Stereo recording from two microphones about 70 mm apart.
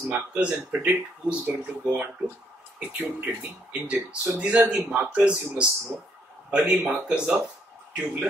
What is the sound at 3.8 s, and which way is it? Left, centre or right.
Speech, centre.